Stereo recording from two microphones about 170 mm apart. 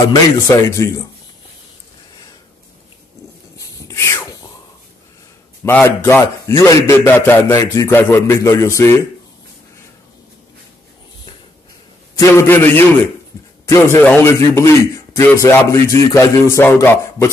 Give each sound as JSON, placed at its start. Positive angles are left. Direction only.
{"t": 0.1, "sound": "a man's voice", "side_deg": 20}
{"t": 3.5, "sound": "a sound", "side_deg": 20}
{"t": 5.6, "sound": "a man's voice", "side_deg": 10}
{"t": 12.2, "sound": "a man's voice", "side_deg": 15}